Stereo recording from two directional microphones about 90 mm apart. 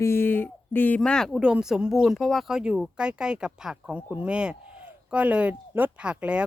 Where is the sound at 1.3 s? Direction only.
10° right (ahead or behind).